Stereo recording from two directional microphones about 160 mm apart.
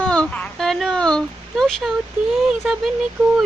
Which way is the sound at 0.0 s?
5° left (ahead or behind).